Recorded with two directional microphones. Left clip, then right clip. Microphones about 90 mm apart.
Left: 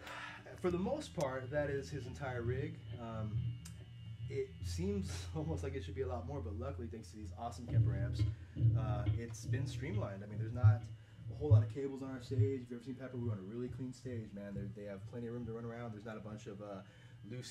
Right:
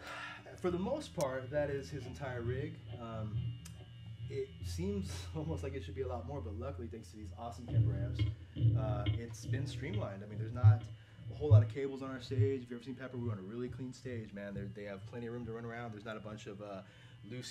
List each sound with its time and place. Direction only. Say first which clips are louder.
0.0 s speech: right 2 dB; 5° right (ahead or behind)
4.3 s speech: even; centre (ahead or behind)